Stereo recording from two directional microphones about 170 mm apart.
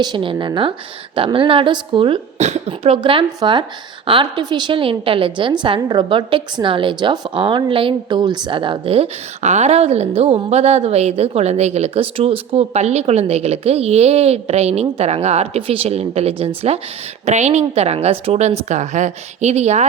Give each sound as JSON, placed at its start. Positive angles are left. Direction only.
{"t": 0.0, "sound": "a woman's voice", "side_deg": -25}